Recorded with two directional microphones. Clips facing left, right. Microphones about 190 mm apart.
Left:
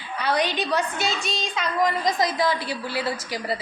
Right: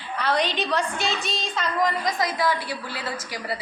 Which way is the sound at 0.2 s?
5° left (ahead or behind).